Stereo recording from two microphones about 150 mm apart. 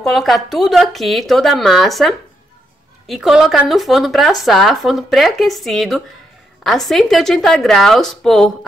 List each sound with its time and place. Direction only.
0.0 s speech: centre (ahead or behind)